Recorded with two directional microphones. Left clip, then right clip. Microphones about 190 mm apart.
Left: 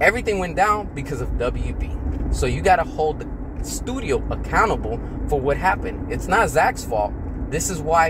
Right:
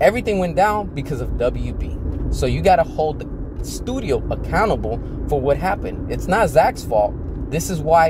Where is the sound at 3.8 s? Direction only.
20° right (ahead or behind).